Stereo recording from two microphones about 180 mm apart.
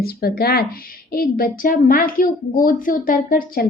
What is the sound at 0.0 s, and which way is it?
A woman's voice, 55° left (ahead or behind).